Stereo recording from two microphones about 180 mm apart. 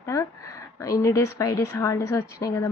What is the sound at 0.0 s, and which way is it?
A woman's voice, 15° left (ahead or behind).